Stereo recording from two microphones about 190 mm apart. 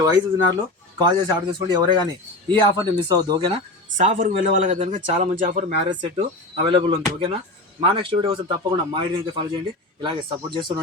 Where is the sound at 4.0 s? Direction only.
40° right (ahead or behind).